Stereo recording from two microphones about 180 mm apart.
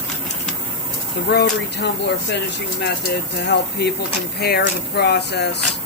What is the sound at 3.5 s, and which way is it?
Speech, 65° left (ahead or behind).